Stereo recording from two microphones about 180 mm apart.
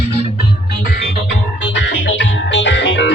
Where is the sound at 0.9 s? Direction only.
60° left (ahead or behind).